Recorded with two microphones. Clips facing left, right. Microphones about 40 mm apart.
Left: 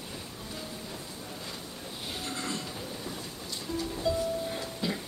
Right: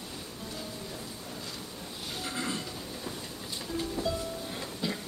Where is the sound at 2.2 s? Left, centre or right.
Centre.